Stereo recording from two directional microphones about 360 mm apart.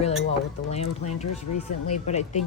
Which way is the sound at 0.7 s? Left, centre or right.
Centre.